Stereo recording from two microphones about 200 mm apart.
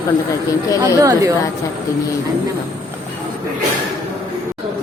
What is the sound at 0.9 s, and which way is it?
Speech, 15° right (ahead or behind).